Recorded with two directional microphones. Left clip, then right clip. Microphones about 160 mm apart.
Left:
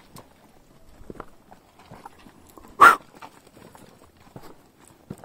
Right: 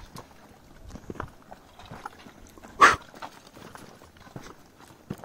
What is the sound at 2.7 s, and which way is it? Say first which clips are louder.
Dog: left 5 dB; 50° left (ahead or behind).